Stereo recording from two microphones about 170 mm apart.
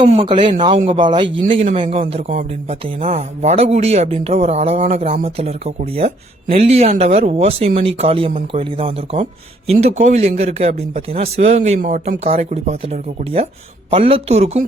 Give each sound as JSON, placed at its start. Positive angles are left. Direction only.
{"t": 0.0, "sound": "a man's voice", "side_deg": -35}
{"t": 9.7, "sound": "speech", "side_deg": -45}